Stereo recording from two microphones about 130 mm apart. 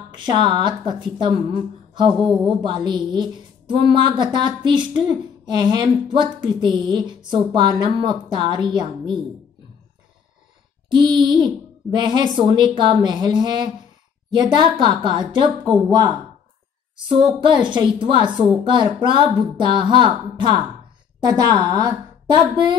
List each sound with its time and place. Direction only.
0.1 s speech: 40° right (ahead or behind)
2.2 s speech: 5° right (ahead or behind)
2.6 s speech: 35° right (ahead or behind)
10.9 s speech: 35° right (ahead or behind)
17.1 s speech: 40° right (ahead or behind)